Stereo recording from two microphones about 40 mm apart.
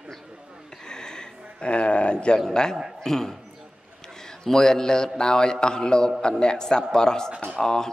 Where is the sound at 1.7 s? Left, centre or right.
Left; by 3.3 s centre.